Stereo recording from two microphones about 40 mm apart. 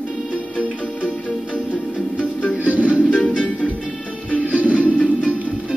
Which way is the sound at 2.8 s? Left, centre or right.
Left.